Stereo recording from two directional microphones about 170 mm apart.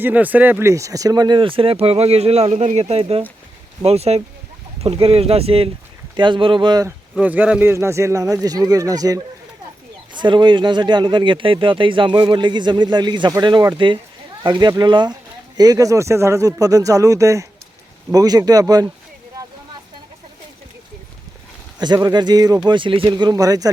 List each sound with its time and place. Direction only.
0.0 s speech: 10° right (ahead or behind)
7.2 s speech: 10° right (ahead or behind)
21.8 s speech: 25° right (ahead or behind)